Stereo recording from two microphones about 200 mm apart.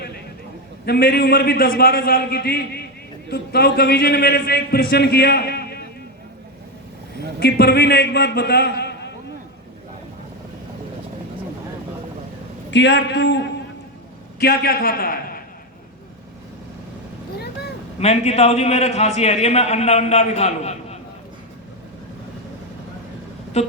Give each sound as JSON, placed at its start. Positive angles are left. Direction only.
{"t": 0.9, "sound": "a man's voice", "side_deg": 50}
{"t": 7.3, "sound": "a man's voice", "side_deg": 55}
{"t": 12.7, "sound": "a man's voice", "side_deg": 60}
{"t": 18.0, "sound": "a man's voice", "side_deg": 30}
{"t": 23.6, "sound": "a man's voice", "side_deg": 35}